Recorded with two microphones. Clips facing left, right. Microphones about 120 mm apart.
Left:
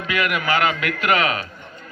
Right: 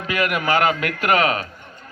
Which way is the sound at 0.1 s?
40° right (ahead or behind).